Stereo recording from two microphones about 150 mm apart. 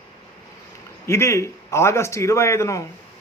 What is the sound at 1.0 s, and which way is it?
A man's voice, 20° left (ahead or behind).